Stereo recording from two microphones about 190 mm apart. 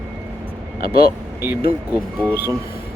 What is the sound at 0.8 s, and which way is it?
Speech, 55° left (ahead or behind).